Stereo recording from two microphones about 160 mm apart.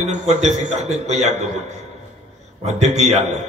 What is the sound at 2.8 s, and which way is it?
Speech, 45° right (ahead or behind).